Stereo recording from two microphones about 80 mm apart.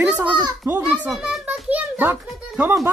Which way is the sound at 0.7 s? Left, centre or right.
Right.